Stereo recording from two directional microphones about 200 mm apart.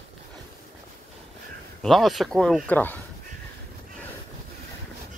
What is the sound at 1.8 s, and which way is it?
Speech, centre (ahead or behind).